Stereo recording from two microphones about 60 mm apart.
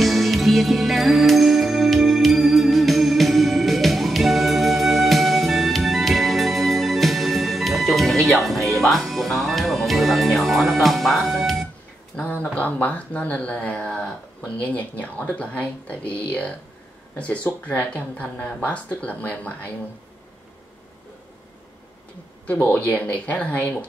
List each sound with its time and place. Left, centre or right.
0.0 s music: centre
12.2 s a sound: left
12.5 s speech: left
22.5 s speech: left